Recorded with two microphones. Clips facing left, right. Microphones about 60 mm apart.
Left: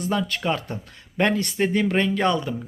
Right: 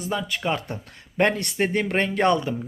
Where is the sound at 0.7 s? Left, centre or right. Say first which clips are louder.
Left 1 dB; right.